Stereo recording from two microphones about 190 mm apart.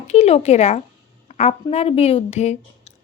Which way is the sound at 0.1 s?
35° left (ahead or behind).